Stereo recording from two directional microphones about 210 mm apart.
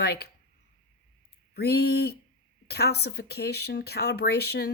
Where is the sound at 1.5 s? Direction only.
50° left (ahead or behind).